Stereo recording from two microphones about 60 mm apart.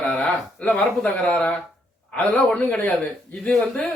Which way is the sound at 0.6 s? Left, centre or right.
Left.